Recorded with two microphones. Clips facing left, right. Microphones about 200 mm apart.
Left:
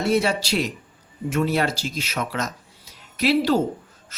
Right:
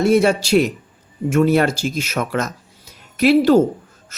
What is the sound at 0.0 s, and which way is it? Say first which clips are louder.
A man's voice: right 6 dB; 50° right (ahead or behind).